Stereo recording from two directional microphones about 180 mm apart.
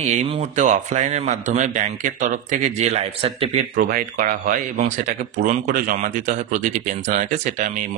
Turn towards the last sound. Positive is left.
turn(degrees=-45)  # may be behind; listen again after turning